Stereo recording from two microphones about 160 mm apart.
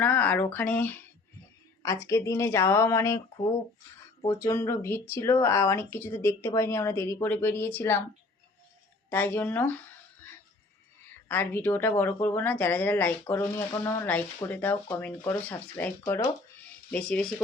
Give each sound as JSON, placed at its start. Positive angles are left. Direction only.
{"t": 0.0, "sound": "speech", "side_deg": 10}
{"t": 4.3, "sound": "speech", "side_deg": 20}
{"t": 9.0, "sound": "speech", "side_deg": 15}
{"t": 11.3, "sound": "speech", "side_deg": 15}